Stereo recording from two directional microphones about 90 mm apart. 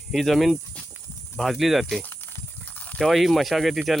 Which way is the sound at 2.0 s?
20° left (ahead or behind).